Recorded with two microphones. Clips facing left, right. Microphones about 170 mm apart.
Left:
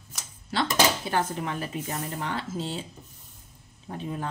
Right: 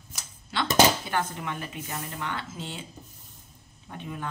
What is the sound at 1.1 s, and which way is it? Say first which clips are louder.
Speech: left 2 dB; 35° left (ahead or behind).